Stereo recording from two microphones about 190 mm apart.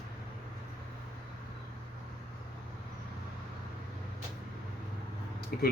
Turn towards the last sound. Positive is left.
turn(degrees=55)  # may be behind; listen again after turning